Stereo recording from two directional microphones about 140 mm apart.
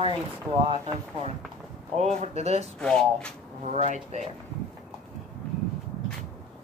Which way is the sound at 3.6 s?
60° right (ahead or behind).